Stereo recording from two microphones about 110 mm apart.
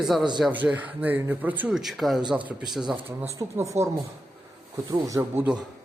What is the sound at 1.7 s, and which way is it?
Speech, 5° right (ahead or behind).